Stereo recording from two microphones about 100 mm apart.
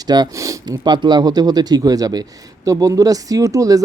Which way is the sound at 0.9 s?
50° right (ahead or behind).